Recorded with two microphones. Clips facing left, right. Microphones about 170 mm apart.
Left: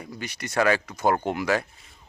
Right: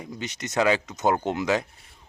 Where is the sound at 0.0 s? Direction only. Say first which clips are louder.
Right 1 dB; 20° right (ahead or behind).